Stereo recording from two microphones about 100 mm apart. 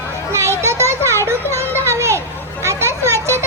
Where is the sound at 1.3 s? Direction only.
25° right (ahead or behind).